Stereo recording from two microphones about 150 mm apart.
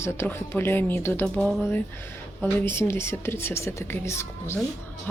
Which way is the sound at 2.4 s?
15° left (ahead or behind).